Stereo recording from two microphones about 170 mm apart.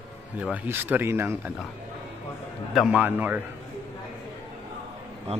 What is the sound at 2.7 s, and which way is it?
Speech, 5° right (ahead or behind).